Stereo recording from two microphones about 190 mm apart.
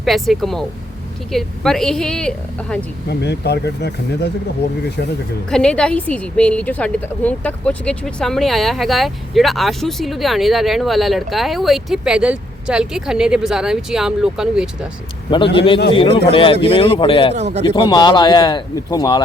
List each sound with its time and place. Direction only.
0.0 s a woman's voice: centre (ahead or behind)
3.1 s speech: 60° left (ahead or behind)
5.5 s a woman's voice: 5° left (ahead or behind)
15.5 s a man's voice: 25° left (ahead or behind)
17.3 s a man's voice: 35° right (ahead or behind)
17.7 s a man's voice: 25° left (ahead or behind)